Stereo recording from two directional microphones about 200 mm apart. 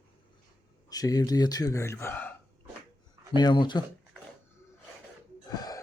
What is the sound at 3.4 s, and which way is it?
Speech, 20° left (ahead or behind).